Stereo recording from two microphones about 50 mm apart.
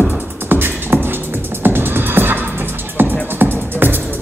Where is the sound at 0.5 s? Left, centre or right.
Right.